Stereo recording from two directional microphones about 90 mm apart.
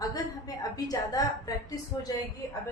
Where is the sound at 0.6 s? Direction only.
45° left (ahead or behind).